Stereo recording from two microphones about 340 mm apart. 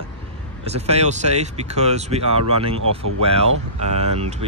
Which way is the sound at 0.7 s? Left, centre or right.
Centre.